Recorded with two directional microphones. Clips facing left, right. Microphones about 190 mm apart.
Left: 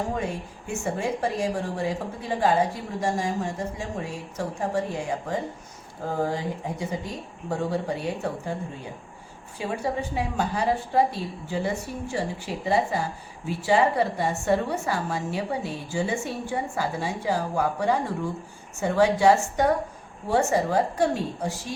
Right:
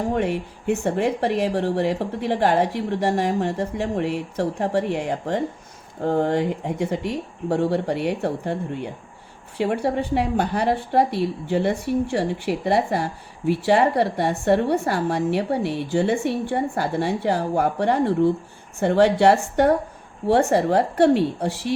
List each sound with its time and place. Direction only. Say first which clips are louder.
0.1 s a woman's voice: right 6 dB; 70° right (ahead or behind)